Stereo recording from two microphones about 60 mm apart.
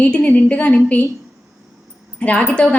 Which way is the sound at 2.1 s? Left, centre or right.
Centre.